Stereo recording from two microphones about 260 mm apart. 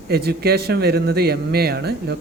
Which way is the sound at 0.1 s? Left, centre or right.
Right.